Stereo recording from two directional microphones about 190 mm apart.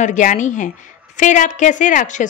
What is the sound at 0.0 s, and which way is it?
A woman's voice, 40° left (ahead or behind).